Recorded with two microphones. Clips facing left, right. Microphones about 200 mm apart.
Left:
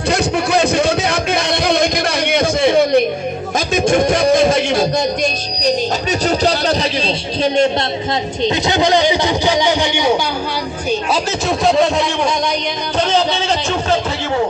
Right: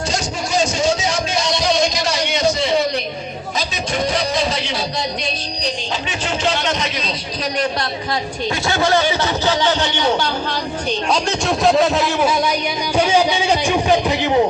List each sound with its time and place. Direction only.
0.1 s music: 60° left (ahead or behind); by 7.7 s 25° left (ahead or behind)
8.4 s a man's voice: 20° left (ahead or behind)
11.1 s speech: centre (ahead or behind)
13.0 s music: 10° right (ahead or behind)